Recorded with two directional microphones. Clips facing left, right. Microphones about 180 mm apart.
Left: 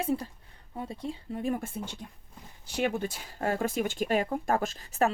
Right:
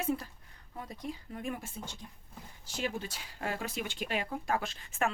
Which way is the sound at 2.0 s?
60° left (ahead or behind).